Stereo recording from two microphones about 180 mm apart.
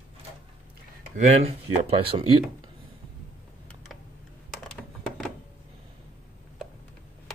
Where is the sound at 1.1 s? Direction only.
40° right (ahead or behind).